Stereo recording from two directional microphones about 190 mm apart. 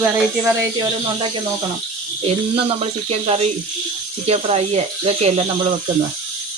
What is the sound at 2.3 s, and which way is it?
Speech, 30° right (ahead or behind).